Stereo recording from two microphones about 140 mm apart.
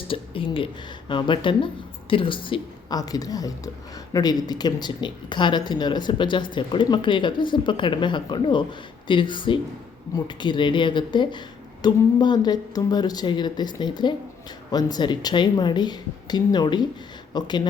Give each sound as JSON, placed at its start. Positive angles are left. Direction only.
{"t": 0.1, "sound": "speech", "side_deg": 40}